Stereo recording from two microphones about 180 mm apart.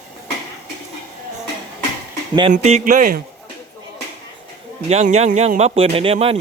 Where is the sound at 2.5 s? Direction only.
35° right (ahead or behind).